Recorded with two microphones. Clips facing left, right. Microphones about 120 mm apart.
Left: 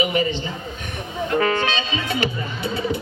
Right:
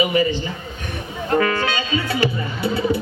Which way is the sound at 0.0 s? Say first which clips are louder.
Right 3 dB; 25° left (ahead or behind).